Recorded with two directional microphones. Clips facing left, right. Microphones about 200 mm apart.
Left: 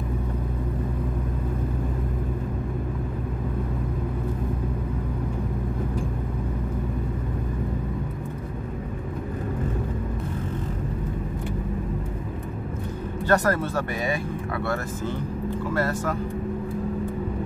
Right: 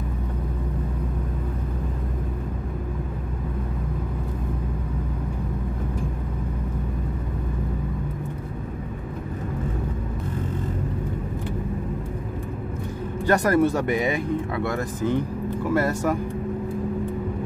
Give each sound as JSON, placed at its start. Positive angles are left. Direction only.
{"t": 13.3, "sound": "speech", "side_deg": -15}